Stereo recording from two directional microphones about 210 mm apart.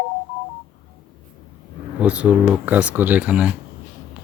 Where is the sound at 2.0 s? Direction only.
5° right (ahead or behind).